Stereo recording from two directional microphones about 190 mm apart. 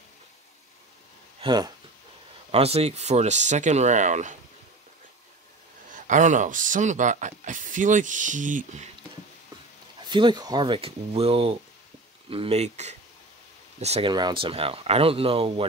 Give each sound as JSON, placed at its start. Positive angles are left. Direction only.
{"t": 1.4, "sound": "speech", "side_deg": -20}
{"t": 5.9, "sound": "speech", "side_deg": -40}
{"t": 10.0, "sound": "speech", "side_deg": -25}